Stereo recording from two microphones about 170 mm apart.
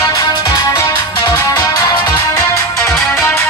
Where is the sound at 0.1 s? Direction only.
20° left (ahead or behind).